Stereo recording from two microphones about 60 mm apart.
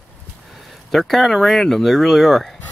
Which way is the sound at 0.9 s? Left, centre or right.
Centre.